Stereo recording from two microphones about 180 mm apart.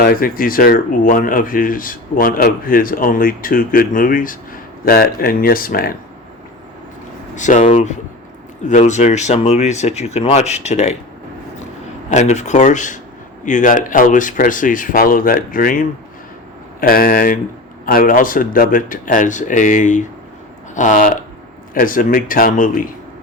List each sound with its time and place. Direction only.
0.0 s speech: 55° left (ahead or behind)
7.3 s speech: 45° left (ahead or behind)
12.1 s speech: 40° left (ahead or behind)